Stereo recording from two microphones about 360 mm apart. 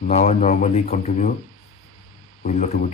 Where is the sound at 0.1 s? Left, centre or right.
Centre.